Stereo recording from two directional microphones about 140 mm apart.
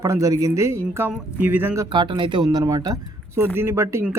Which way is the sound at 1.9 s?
35° right (ahead or behind).